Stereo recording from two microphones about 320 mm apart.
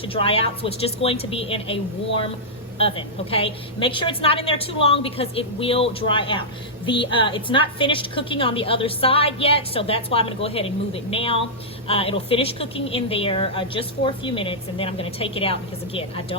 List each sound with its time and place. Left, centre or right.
0.0 s a woman's voice: centre